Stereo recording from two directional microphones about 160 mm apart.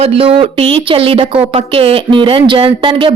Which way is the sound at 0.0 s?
35° right (ahead or behind).